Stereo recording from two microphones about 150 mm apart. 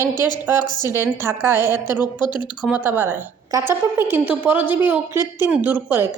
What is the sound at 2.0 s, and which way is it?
Speech, 30° left (ahead or behind).